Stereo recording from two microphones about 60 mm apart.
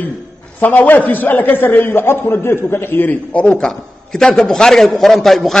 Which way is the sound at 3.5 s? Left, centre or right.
Centre.